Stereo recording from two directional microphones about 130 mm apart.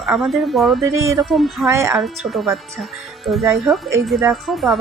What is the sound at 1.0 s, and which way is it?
Speech, 25° right (ahead or behind).